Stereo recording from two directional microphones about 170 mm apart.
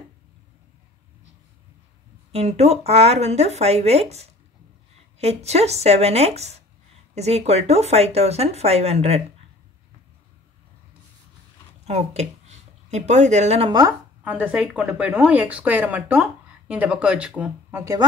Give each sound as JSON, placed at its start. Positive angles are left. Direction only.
{"t": 2.3, "sound": "speech", "side_deg": -40}
{"t": 11.8, "sound": "speech", "side_deg": -40}
{"t": 14.2, "sound": "speech", "side_deg": -10}